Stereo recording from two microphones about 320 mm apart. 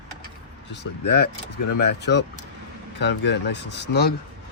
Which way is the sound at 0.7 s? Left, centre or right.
Left.